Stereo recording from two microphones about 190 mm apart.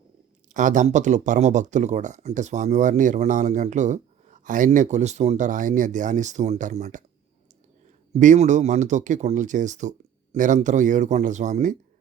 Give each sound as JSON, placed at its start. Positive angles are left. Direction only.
{"t": 0.5, "sound": "speech", "side_deg": -40}
{"t": 8.2, "sound": "speech", "side_deg": -40}